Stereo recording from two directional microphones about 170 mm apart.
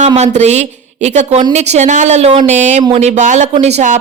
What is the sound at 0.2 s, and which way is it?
Speech, 40° right (ahead or behind).